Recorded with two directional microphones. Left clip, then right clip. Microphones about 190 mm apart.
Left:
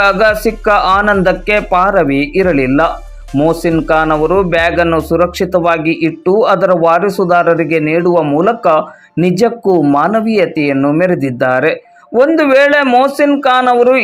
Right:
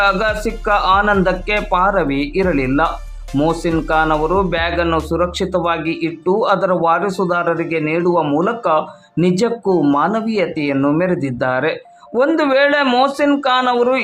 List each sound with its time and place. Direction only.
0.0 s speech: 20° left (ahead or behind)